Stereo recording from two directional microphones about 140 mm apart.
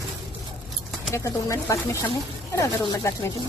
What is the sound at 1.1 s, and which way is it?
Speech, 20° left (ahead or behind).